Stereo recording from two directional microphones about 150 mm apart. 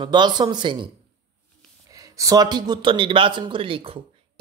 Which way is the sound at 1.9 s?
25° right (ahead or behind).